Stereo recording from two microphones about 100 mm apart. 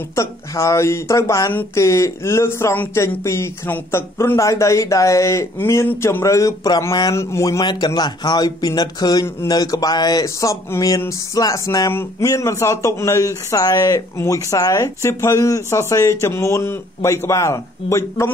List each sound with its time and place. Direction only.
0.1 s speech: 30° left (ahead or behind)
1.5 s speech: 20° left (ahead or behind)
1.9 s speech: 30° left (ahead or behind)
7.6 s a man's voice: 45° left (ahead or behind)
11.9 s a man's voice: 20° left (ahead or behind)